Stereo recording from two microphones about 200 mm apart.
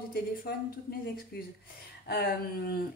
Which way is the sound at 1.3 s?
50° left (ahead or behind).